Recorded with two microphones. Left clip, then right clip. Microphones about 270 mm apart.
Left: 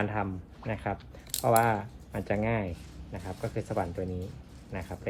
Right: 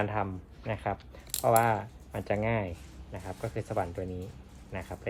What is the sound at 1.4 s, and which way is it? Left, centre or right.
Speech, right.